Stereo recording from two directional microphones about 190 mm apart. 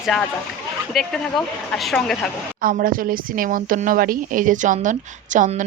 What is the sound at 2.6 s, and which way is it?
A woman's voice, 50° right (ahead or behind).